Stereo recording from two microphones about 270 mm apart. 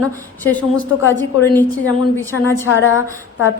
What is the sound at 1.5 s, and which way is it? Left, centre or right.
Speech, centre.